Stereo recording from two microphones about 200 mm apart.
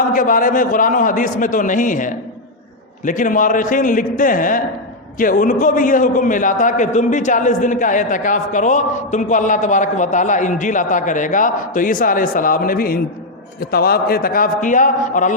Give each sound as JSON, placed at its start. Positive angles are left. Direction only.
{"t": 0.1, "sound": "a man's voice", "side_deg": 45}